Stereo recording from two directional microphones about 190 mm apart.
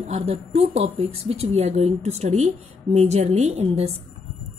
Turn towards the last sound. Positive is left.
turn(degrees=-35)  # may be behind; listen again after turning